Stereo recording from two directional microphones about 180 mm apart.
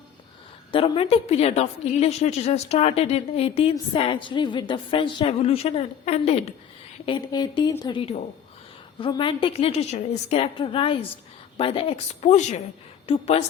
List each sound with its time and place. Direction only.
0.7 s a woman's voice: 30° left (ahead or behind)
7.0 s a woman's voice: 25° left (ahead or behind)